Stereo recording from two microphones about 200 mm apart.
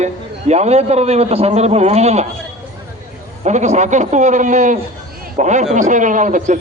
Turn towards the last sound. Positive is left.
turn(degrees=-40)  # may be behind; listen again after turning